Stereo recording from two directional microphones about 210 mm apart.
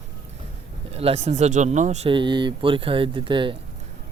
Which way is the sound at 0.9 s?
30° right (ahead or behind).